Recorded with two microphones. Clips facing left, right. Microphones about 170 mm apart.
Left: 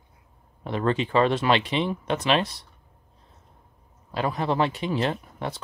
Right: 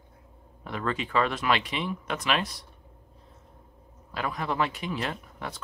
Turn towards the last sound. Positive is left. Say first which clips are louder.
# left 6 dB
turn(degrees=30)  # may be behind; listen again after turning